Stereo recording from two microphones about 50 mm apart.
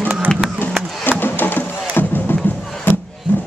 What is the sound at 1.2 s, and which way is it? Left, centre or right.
Music, left.